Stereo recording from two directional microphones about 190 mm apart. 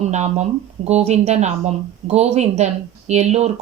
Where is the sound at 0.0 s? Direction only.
35° right (ahead or behind).